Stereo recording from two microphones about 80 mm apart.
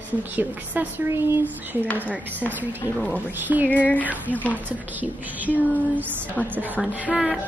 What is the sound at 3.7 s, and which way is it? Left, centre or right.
Speech, centre.